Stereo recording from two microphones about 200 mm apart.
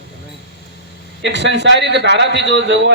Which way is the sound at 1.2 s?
60° right (ahead or behind).